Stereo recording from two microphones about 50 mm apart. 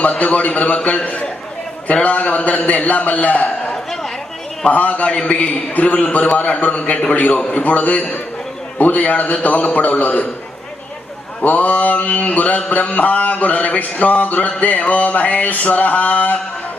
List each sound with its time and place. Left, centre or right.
0.0 s a man's voice: left
7.6 s mantra: left
11.4 s mantra: left